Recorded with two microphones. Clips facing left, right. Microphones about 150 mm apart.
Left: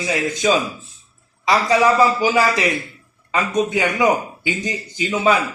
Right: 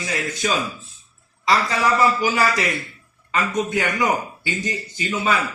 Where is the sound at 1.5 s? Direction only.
20° left (ahead or behind).